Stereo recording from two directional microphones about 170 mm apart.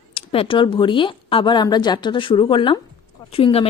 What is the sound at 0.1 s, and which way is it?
Speech, 35° left (ahead or behind).